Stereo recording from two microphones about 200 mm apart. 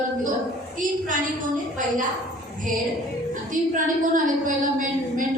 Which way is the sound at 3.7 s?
40° right (ahead or behind).